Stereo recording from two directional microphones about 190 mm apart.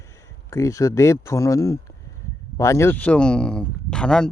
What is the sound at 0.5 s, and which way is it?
Speech, 15° left (ahead or behind).